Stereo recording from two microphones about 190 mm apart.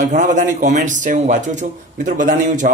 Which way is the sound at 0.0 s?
40° right (ahead or behind).